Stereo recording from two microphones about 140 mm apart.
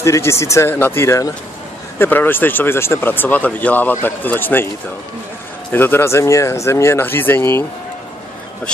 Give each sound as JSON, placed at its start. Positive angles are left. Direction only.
{"t": 0.0, "sound": "speech", "side_deg": 20}
{"t": 5.7, "sound": "speech", "side_deg": 15}